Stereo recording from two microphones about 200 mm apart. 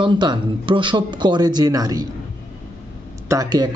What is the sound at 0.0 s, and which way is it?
A man's voice, 20° right (ahead or behind).